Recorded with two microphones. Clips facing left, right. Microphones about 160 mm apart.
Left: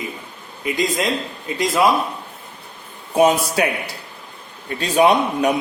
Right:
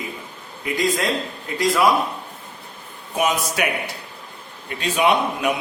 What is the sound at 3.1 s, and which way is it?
Speech, 30° left (ahead or behind).